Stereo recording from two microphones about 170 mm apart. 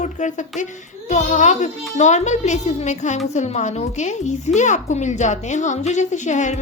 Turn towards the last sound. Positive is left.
turn(degrees=45)  # may be behind; listen again after turning